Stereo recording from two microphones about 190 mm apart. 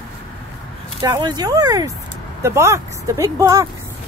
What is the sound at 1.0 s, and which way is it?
Speech, 20° right (ahead or behind).